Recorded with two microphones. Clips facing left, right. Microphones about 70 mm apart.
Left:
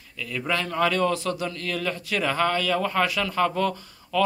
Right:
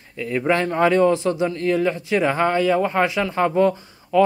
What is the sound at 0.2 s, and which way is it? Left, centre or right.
A man's voice, right.